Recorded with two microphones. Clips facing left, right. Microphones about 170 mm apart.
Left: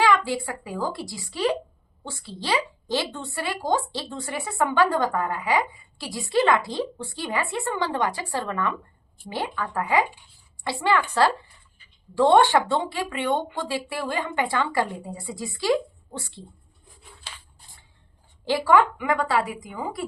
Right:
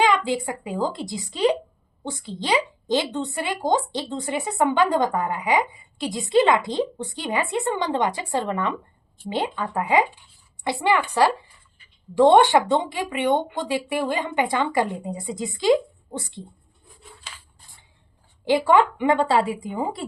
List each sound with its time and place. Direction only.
0.3 s a woman's voice: 20° right (ahead or behind)
18.4 s a woman's voice: 20° right (ahead or behind)